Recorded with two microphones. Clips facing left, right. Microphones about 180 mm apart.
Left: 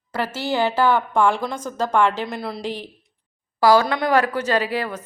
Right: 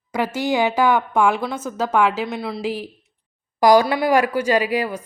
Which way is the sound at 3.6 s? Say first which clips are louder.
Right 2 dB; 15° right (ahead or behind).